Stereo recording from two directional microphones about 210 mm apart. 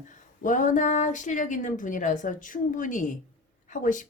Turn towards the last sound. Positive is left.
turn(degrees=40)  # may be behind; listen again after turning